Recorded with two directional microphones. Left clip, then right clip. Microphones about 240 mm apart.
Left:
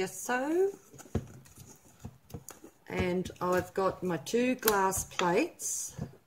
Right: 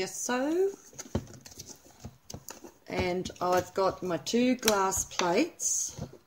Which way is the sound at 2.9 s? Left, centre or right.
Centre.